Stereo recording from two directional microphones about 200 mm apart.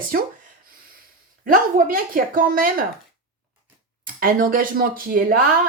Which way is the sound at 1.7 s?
45° right (ahead or behind).